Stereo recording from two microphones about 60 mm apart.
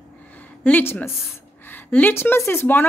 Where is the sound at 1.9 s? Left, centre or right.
Left.